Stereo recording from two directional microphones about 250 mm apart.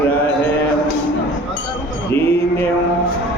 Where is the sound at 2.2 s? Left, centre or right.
Centre.